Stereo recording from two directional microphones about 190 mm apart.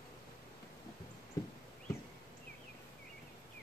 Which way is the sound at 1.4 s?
15° left (ahead or behind).